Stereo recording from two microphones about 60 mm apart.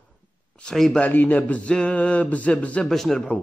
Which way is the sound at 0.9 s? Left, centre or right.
Left.